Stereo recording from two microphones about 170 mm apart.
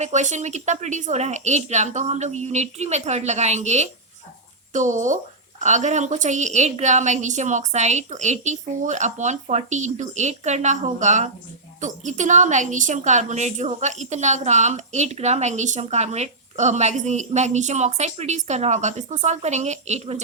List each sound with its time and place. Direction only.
0.0 s a woman's voice: 45° right (ahead or behind)